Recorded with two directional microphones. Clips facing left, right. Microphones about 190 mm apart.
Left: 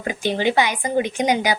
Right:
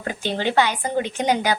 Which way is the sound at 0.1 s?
15° left (ahead or behind).